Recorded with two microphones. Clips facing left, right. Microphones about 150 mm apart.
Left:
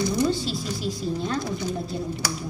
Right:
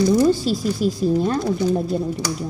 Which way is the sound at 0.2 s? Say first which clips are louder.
Right 7 dB; 40° right (ahead or behind).